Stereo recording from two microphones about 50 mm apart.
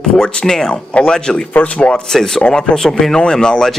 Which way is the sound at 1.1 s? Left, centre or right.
Centre.